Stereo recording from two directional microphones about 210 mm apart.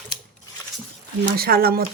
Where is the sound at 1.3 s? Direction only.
45° right (ahead or behind).